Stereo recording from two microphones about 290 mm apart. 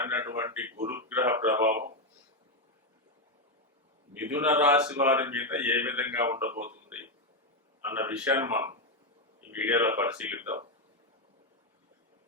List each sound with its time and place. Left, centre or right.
0.0 s speech: centre
1.7 s speech: right
4.1 s speech: centre
7.9 s speech: centre